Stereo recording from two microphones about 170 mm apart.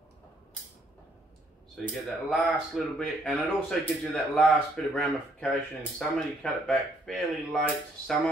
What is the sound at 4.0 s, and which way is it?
Speech, 5° left (ahead or behind).